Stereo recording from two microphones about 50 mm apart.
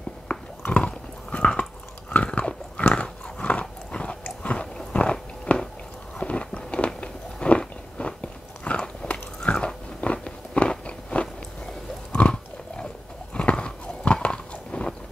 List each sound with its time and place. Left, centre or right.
0.3 s chewing: left
0.8 s biting: left
2.9 s dog: left
4.4 s biting: left